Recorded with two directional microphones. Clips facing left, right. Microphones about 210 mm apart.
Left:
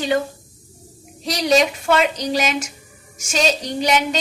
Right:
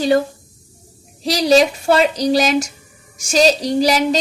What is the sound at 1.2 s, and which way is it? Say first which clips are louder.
A woman's voice: right 4 dB; 30° right (ahead or behind).